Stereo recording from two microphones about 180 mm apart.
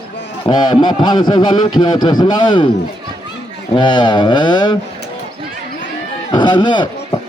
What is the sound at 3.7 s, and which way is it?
A man's voice, 25° left (ahead or behind).